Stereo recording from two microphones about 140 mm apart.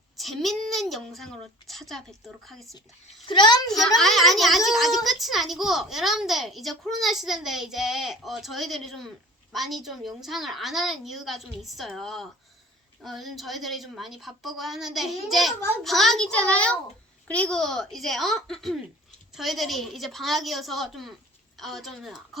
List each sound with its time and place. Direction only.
0.2 s a child's voice: centre (ahead or behind)
3.2 s a child's voice: 35° left (ahead or behind)
3.7 s a child's voice: centre (ahead or behind)